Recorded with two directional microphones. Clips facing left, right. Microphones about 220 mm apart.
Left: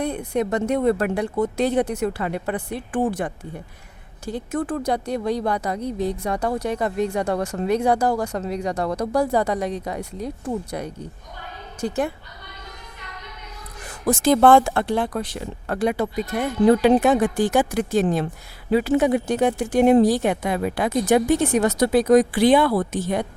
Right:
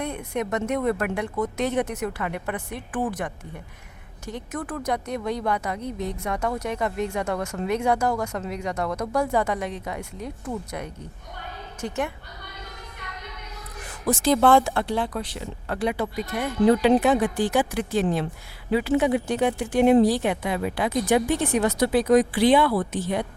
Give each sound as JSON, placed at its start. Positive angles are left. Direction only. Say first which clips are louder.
{"t": 0.0, "sound": "a woman's voice", "louder": "left 5 dB", "side_deg": 30}
{"t": 14.1, "sound": "speech", "louder": "left 4 dB", "side_deg": 50}